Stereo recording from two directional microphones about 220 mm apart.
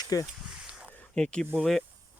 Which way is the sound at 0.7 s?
5° right (ahead or behind).